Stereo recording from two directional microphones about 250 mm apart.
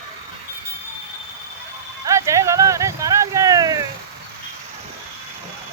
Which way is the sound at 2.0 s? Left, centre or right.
Centre.